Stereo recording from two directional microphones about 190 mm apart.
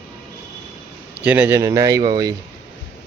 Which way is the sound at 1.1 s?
10° right (ahead or behind).